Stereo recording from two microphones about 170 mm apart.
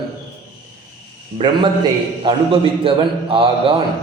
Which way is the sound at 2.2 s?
30° right (ahead or behind).